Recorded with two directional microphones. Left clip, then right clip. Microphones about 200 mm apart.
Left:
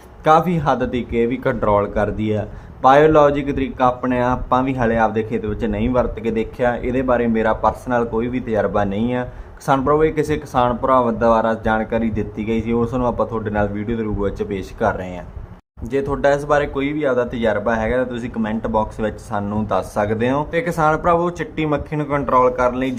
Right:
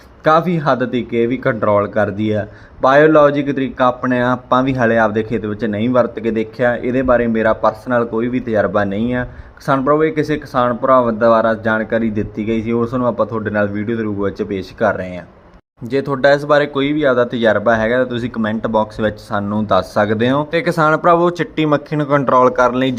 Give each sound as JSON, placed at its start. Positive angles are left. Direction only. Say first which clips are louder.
{"t": 0.3, "sound": "a man's voice", "louder": "right 2 dB", "side_deg": -10}